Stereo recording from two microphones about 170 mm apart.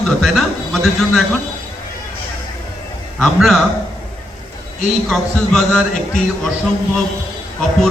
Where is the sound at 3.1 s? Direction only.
Centre (ahead or behind).